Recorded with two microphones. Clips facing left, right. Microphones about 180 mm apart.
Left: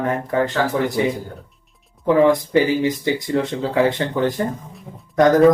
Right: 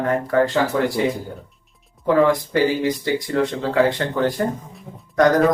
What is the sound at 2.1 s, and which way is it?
Speech, 20° left (ahead or behind).